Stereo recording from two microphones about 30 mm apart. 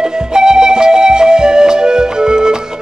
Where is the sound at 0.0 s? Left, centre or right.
Right.